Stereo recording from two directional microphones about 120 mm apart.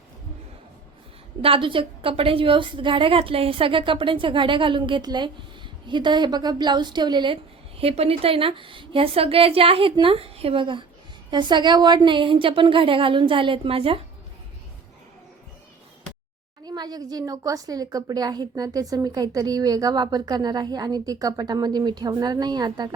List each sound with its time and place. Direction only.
1.4 s a woman's voice: 50° right (ahead or behind)
7.8 s a woman's voice: 55° right (ahead or behind)
16.6 s a woman's voice: 35° right (ahead or behind)